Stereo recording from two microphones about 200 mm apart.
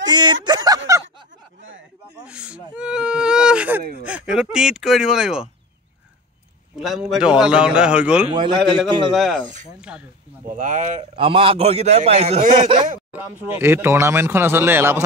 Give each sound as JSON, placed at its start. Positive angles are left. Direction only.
{"t": 0.0, "sound": "a sound", "side_deg": -20}
{"t": 2.2, "sound": "whimper", "side_deg": -5}
{"t": 4.0, "sound": "speech", "side_deg": -5}
{"t": 6.8, "sound": "a man's voice", "side_deg": 0}
{"t": 8.3, "sound": "a man's voice", "side_deg": -25}
{"t": 9.1, "sound": "a man's voice", "side_deg": 0}
{"t": 10.5, "sound": "a man's voice", "side_deg": -40}
{"t": 11.1, "sound": "a man's voice", "side_deg": -25}
{"t": 13.6, "sound": "speech", "side_deg": -10}